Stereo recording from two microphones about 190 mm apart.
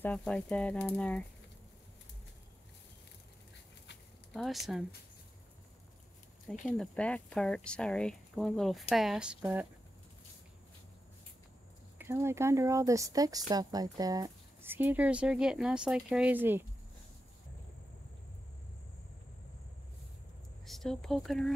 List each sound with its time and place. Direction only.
0.0 s speech: 5° left (ahead or behind)
4.3 s speech: centre (ahead or behind)
6.6 s speech: 5° left (ahead or behind)
12.0 s speech: 15° right (ahead or behind)
20.6 s speech: centre (ahead or behind)